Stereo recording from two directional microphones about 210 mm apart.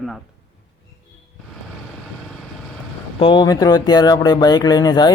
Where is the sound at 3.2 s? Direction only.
20° left (ahead or behind).